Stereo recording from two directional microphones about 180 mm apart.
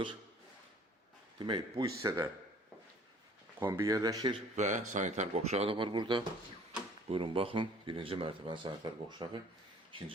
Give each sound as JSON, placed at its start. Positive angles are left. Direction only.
{"t": 1.4, "sound": "speech", "side_deg": -25}
{"t": 3.6, "sound": "speech", "side_deg": -15}
{"t": 4.5, "sound": "speech", "side_deg": -40}